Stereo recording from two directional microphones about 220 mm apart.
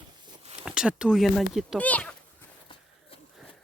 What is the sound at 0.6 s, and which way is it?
Speech, 5° right (ahead or behind).